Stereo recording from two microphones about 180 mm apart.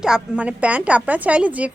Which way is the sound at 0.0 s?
5° right (ahead or behind).